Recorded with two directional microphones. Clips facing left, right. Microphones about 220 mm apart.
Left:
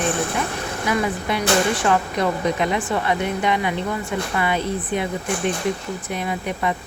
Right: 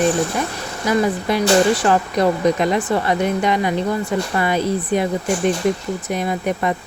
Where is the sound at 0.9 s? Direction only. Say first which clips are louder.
Right 5 dB; 35° right (ahead or behind).